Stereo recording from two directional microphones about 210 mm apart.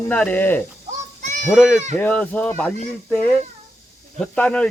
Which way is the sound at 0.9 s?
35° right (ahead or behind).